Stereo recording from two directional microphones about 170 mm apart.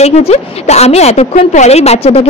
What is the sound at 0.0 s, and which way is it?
A woman's voice, 40° left (ahead or behind).